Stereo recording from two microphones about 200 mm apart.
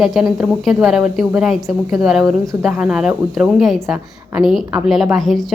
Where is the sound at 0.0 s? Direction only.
Centre (ahead or behind).